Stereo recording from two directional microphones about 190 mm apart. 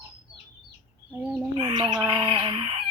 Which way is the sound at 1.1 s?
10° right (ahead or behind).